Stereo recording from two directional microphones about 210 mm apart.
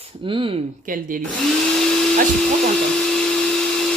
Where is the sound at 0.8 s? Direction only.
40° right (ahead or behind).